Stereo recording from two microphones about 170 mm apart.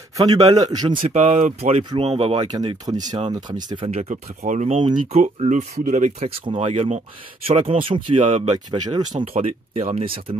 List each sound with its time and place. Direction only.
0.2 s a man's voice: 25° right (ahead or behind)
1.1 s speech: 45° right (ahead or behind)
1.9 s a man's voice: 35° right (ahead or behind)
3.7 s speech: 35° right (ahead or behind)
6.2 s speech: 30° right (ahead or behind)
8.7 s a man's voice: 25° right (ahead or behind)
9.2 s speech: 35° right (ahead or behind)